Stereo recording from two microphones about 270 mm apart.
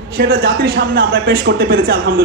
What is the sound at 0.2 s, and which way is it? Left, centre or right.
Speech, right.